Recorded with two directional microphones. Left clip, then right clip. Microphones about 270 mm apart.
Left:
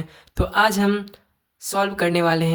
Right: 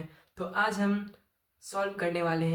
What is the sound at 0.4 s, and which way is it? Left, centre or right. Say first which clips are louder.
Speech: left 11 dB; left.